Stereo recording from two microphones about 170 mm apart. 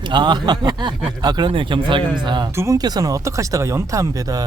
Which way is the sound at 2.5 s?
15° right (ahead or behind).